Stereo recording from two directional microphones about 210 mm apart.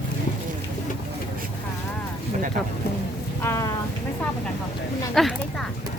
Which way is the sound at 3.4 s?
15° left (ahead or behind).